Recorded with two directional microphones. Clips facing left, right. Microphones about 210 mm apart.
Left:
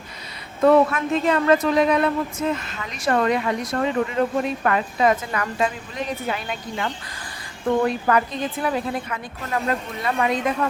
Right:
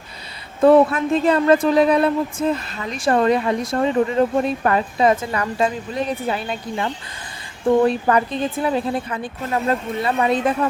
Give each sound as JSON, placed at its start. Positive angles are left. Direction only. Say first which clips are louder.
{"t": 0.6, "sound": "a woman's voice", "louder": "right 3 dB", "side_deg": -30}